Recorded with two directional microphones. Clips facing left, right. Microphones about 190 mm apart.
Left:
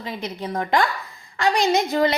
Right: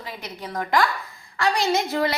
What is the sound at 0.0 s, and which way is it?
A woman's voice, 20° left (ahead or behind).